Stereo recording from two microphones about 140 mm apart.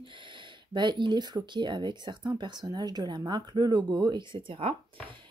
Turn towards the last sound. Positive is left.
turn(degrees=-40)  # may be behind; listen again after turning